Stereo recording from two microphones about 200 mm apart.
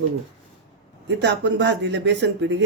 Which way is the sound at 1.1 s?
60° right (ahead or behind).